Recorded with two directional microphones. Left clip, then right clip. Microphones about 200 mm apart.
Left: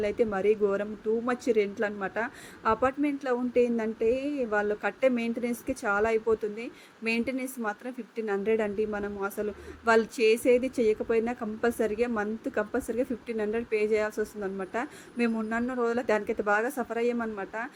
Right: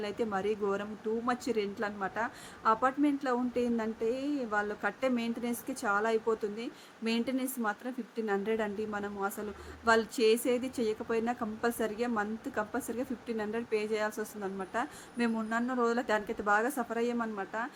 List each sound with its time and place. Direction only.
0.0 s speech: 10° left (ahead or behind)